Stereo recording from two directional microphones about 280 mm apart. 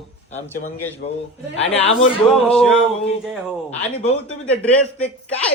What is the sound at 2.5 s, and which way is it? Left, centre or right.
Speech, centre.